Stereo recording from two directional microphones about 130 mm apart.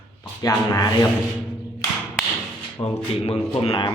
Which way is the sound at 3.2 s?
50° left (ahead or behind).